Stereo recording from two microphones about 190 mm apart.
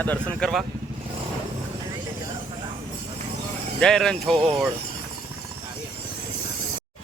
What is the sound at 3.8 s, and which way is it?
Speech, 5° left (ahead or behind).